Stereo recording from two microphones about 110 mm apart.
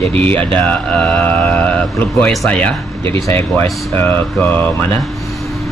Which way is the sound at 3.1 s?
30° left (ahead or behind).